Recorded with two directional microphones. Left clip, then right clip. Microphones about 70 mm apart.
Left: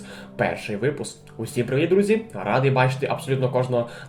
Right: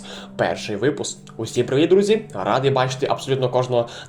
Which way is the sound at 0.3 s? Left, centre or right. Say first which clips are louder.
Right 3 dB; right.